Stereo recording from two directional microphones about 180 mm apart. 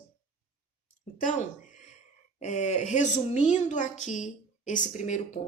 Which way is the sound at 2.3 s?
40° left (ahead or behind).